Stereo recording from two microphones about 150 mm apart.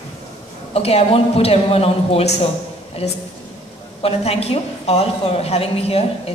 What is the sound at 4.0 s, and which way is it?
A woman's voice, 40° left (ahead or behind).